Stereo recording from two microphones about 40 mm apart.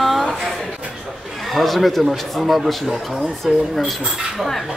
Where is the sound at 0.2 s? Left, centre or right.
Centre.